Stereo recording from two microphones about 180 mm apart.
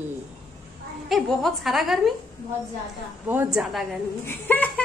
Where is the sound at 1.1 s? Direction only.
Centre (ahead or behind).